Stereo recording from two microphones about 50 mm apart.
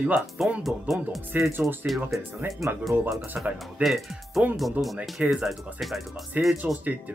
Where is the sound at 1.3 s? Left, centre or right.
Right.